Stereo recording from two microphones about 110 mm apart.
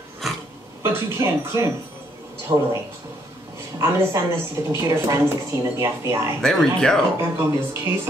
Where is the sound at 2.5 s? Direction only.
35° right (ahead or behind).